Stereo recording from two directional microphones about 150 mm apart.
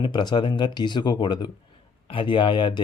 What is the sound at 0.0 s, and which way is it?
Speech, 30° left (ahead or behind).